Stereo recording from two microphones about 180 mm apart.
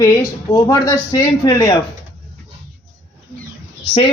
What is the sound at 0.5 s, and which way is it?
Speech, 20° left (ahead or behind).